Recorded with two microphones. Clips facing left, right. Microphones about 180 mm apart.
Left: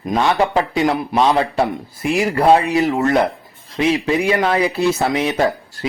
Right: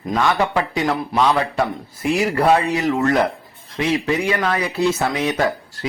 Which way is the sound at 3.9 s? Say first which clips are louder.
Left 1 dB; 20° left (ahead or behind).